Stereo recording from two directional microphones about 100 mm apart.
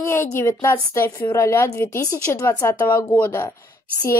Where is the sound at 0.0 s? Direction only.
25° left (ahead or behind).